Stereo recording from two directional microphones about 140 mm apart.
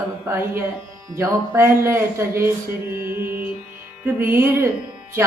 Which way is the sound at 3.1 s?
90° right.